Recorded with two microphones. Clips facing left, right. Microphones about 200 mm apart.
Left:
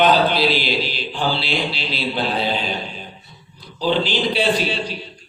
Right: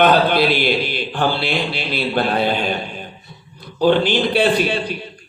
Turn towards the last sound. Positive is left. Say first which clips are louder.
# right 3 dB
turn(degrees=-55)  # may be behind; listen again after turning